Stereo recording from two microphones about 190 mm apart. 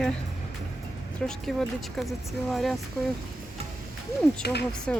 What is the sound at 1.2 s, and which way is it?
Speech, 5° left (ahead or behind).